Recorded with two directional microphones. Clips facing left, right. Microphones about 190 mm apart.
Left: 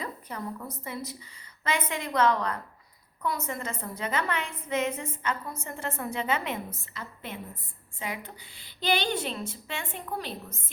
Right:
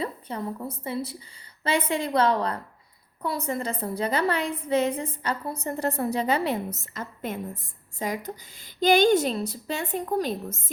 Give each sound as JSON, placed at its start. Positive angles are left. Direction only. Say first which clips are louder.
{"t": 0.0, "sound": "a woman's voice", "louder": "right 5 dB", "side_deg": -30}